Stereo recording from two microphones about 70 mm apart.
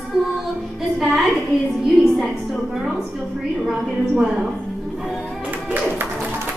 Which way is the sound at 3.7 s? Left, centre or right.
Centre.